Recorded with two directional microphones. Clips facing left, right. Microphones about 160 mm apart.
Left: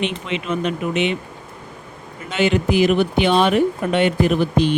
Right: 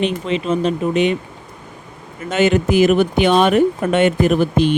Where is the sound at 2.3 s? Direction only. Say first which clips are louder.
Right 3 dB; 45° right (ahead or behind).